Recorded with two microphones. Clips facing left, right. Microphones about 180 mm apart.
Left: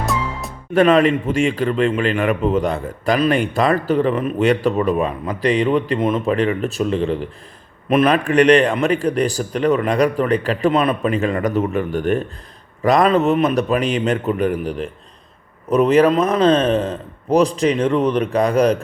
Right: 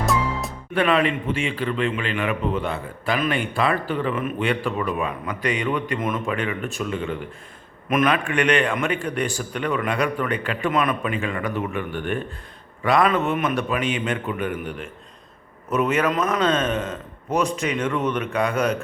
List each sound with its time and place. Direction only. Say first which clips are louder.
0.0 s music: even; centre (ahead or behind)
0.7 s a man's voice: left 7 dB; 45° left (ahead or behind)